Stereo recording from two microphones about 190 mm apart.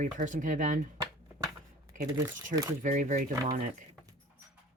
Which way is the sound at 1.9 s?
40° right (ahead or behind).